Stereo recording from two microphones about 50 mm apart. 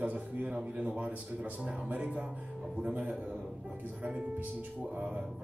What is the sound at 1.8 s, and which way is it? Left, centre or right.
Speech, right.